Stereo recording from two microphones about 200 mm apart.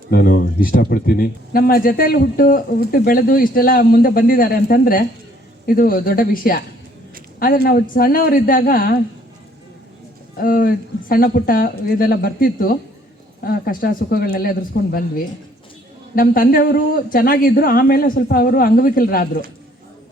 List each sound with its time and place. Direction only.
0.1 s speech: 45° left (ahead or behind)
10.3 s speech: 45° left (ahead or behind)